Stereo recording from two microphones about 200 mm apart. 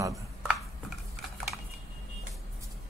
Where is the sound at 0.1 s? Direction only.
5° right (ahead or behind).